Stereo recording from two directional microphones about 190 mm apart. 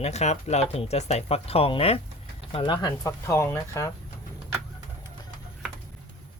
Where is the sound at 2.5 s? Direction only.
25° left (ahead or behind).